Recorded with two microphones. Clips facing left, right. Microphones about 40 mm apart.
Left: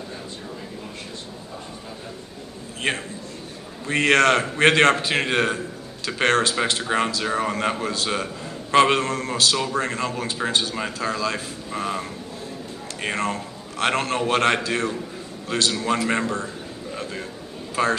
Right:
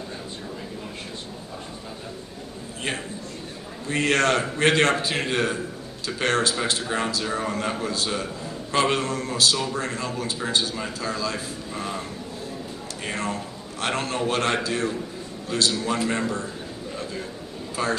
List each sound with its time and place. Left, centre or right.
2.8 s a man's voice: left
17.0 s a sound: left
17.8 s a man's voice: left